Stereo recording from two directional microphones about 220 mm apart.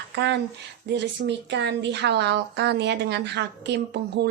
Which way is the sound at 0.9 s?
50° right (ahead or behind).